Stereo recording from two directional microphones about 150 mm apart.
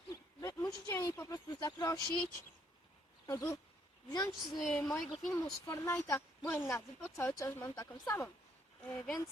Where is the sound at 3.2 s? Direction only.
20° left (ahead or behind).